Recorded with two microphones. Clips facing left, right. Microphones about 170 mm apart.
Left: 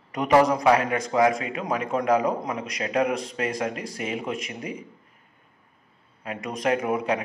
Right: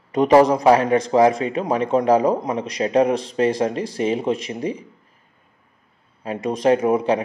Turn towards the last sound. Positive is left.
turn(degrees=-30)  # may be behind; listen again after turning